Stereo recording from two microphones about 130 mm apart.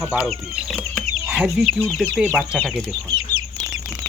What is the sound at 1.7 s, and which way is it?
Speech, 10° left (ahead or behind).